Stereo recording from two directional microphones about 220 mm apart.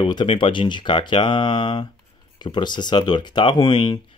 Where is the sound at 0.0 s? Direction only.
20° left (ahead or behind).